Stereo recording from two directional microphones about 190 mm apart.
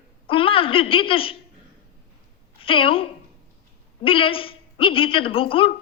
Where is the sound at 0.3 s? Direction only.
30° left (ahead or behind).